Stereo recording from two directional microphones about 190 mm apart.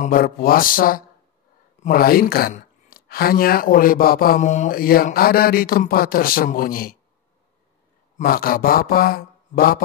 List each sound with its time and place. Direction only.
0.0 s speech: 50° left (ahead or behind)
8.2 s speech: 50° left (ahead or behind)